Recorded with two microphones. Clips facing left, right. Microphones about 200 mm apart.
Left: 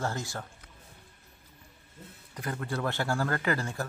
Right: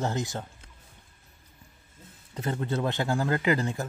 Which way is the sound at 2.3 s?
25° right (ahead or behind).